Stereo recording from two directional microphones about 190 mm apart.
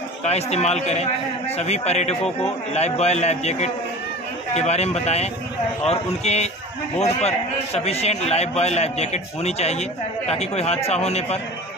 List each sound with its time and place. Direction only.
0.2 s a man's voice: 35° left (ahead or behind)